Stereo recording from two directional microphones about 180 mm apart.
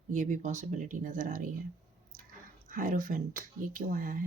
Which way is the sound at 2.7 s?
45° right (ahead or behind).